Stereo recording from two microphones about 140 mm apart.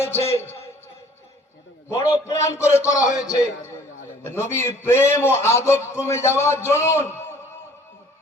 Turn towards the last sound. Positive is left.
turn(degrees=15)  # may be behind; listen again after turning